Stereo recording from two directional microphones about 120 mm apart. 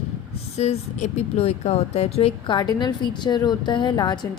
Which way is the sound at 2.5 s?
35° left (ahead or behind).